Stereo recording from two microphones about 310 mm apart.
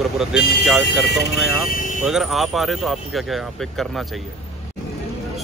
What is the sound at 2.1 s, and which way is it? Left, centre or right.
Speech, centre.